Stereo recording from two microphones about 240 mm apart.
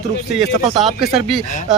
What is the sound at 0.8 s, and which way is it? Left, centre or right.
Speech, centre.